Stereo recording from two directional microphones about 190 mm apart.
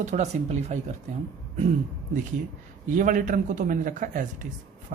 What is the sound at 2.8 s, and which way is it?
A man's voice, 45° right (ahead or behind).